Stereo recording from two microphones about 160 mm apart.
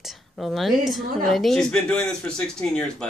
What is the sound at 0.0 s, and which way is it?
A woman's voice, centre (ahead or behind).